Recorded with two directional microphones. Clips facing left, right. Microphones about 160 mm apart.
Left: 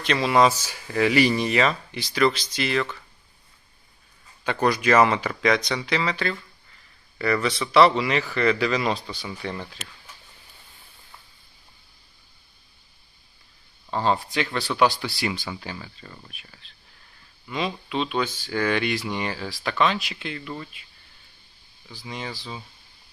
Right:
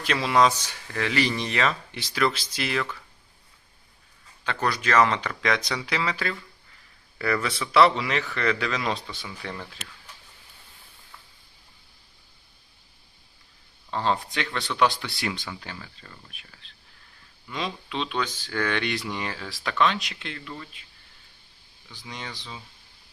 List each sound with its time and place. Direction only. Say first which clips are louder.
0.0 s speech: left 2 dB; 5° right (ahead or behind)
4.4 s speech: left 5 dB; 10° left (ahead or behind); by 6.3 s 5° right (ahead or behind)
7.6 s speech: left 2 dB; centre (ahead or behind)
13.9 s speech: left 3 dB; 5° left (ahead or behind)
21.9 s speech: left 4 dB; centre (ahead or behind)